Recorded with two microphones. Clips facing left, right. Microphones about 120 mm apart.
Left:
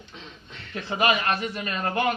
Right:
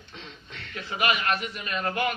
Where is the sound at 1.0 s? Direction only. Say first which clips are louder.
Left 3 dB; 30° left (ahead or behind).